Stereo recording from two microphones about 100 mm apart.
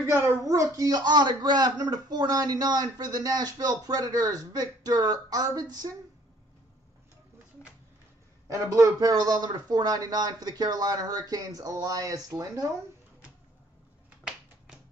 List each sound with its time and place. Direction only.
0.0 s speech: 30° right (ahead or behind)
8.5 s speech: 30° right (ahead or behind)